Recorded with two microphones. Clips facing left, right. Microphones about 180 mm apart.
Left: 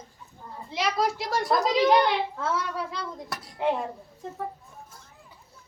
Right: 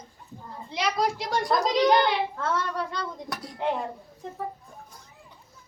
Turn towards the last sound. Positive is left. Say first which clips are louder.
# even
turn(degrees=0)  # may be behind; listen again after turning